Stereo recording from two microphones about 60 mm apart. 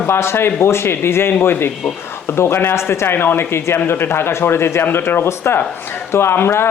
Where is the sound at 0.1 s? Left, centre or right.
Left.